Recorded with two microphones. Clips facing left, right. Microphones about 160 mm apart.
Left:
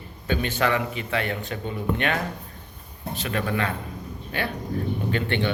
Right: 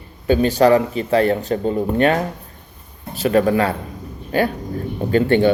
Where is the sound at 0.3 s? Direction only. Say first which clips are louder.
Right 11 dB; 35° right (ahead or behind).